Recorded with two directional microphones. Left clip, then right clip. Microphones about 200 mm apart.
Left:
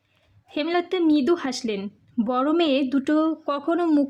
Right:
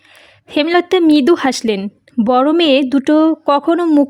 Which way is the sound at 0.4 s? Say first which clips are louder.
Right 11 dB; 45° right (ahead or behind).